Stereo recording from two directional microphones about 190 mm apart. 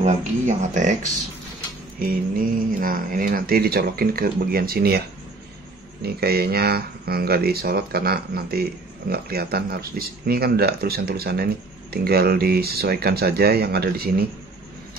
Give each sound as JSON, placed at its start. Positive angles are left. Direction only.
{"t": 0.0, "sound": "speech", "side_deg": -40}
{"t": 2.0, "sound": "speech", "side_deg": -50}
{"t": 6.0, "sound": "speech", "side_deg": -55}